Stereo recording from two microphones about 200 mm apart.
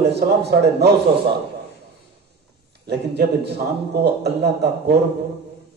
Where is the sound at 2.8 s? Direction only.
55° right (ahead or behind).